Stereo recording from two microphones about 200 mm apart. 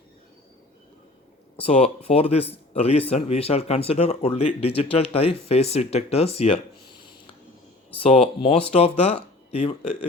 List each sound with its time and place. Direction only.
1.5 s speech: 30° left (ahead or behind)
8.0 s speech: 30° left (ahead or behind)